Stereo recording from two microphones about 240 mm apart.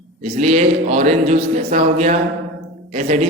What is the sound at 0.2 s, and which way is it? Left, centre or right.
Speech, right.